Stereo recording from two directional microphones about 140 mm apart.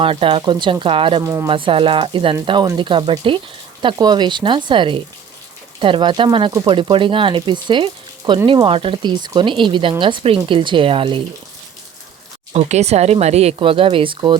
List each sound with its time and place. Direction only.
0.0 s speech: 40° right (ahead or behind)
1.2 s speech: 20° right (ahead or behind)
1.5 s speech: 35° right (ahead or behind)
12.5 s speech: 50° right (ahead or behind); by 14.3 s 35° right (ahead or behind)